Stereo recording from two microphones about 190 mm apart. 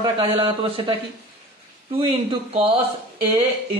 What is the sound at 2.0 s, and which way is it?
Speech, 30° right (ahead or behind).